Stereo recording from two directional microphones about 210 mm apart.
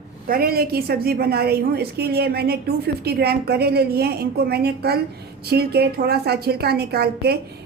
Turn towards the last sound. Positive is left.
turn(degrees=-50)  # may be behind; listen again after turning